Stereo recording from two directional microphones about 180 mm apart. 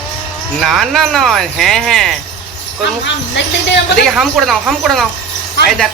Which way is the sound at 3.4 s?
75° left (ahead or behind).